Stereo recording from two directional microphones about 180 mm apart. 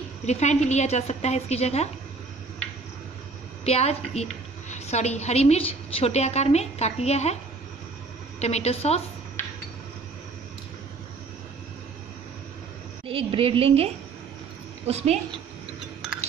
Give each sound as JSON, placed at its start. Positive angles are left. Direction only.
{"t": 0.2, "sound": "a woman's voice", "side_deg": 40}
{"t": 3.6, "sound": "a woman's voice", "side_deg": 35}
{"t": 8.4, "sound": "a woman's voice", "side_deg": 35}
{"t": 13.0, "sound": "a woman's voice", "side_deg": -30}
{"t": 14.9, "sound": "a woman's voice", "side_deg": -35}